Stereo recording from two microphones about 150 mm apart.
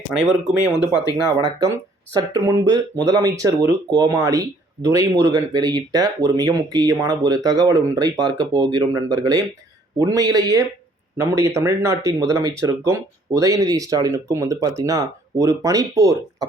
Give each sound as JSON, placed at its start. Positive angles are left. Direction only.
{"t": 0.2, "sound": "speech", "side_deg": 0}
{"t": 1.4, "sound": "speech", "side_deg": -25}